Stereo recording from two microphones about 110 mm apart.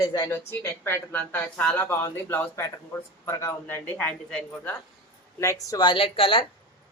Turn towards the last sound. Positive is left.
turn(degrees=55)  # may be behind; listen again after turning